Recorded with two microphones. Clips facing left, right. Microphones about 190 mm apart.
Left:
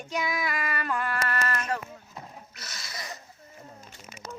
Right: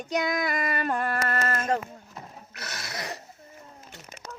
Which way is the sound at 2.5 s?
65° right (ahead or behind).